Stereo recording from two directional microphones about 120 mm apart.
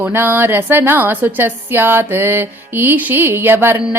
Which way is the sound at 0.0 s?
20° right (ahead or behind).